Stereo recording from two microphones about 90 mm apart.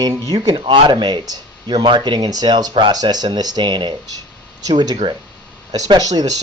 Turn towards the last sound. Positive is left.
turn(degrees=-50)  # may be behind; listen again after turning